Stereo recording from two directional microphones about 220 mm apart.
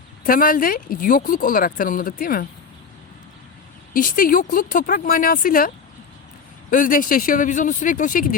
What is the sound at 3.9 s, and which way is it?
Speech, 40° left (ahead or behind).